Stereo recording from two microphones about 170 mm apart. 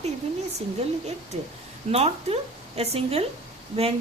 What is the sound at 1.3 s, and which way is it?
Speech, 40° right (ahead or behind).